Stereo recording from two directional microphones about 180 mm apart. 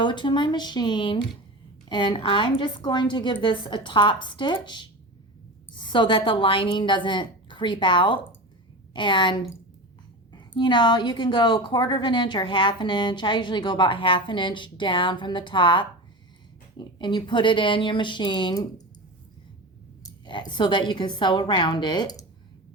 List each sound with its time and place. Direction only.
0.0 s a woman's voice: 25° left (ahead or behind)
20.1 s a woman's voice: 25° left (ahead or behind)